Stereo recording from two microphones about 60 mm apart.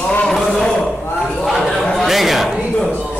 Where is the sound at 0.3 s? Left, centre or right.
Centre.